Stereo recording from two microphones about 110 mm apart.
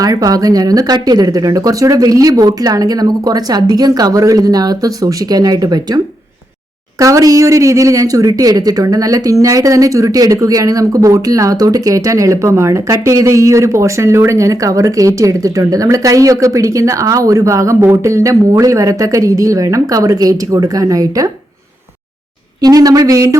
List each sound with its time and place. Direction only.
0.0 s speech: 35° right (ahead or behind)
7.0 s speech: 30° right (ahead or behind)
22.6 s speech: 35° right (ahead or behind)